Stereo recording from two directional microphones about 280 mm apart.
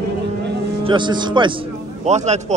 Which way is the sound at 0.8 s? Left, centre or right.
Centre.